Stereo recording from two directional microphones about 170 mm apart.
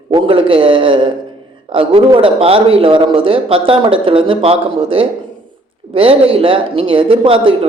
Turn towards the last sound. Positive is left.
turn(degrees=-30)  # may be behind; listen again after turning